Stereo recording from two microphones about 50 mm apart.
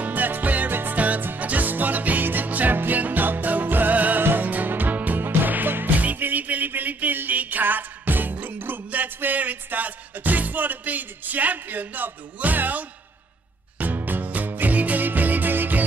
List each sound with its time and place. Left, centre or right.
0.0 s music: right
13.9 s music: right